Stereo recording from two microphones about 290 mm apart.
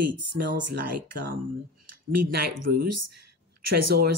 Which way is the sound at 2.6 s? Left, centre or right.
Right.